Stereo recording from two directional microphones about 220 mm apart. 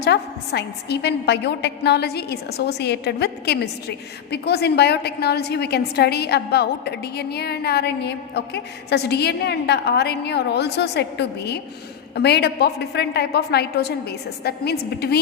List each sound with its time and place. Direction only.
0.0 s a woman's voice: 50° left (ahead or behind)